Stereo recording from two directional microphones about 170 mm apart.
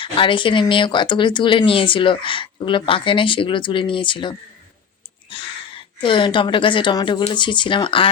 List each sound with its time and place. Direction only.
0.0 s speech: 30° left (ahead or behind)